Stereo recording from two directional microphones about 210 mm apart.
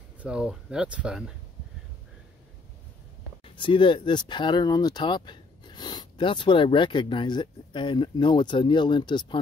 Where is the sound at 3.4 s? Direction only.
25° left (ahead or behind).